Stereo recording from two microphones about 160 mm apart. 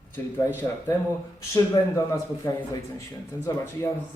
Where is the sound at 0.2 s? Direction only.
15° left (ahead or behind).